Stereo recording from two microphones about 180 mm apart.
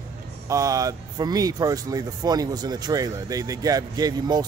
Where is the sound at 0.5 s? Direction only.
20° right (ahead or behind).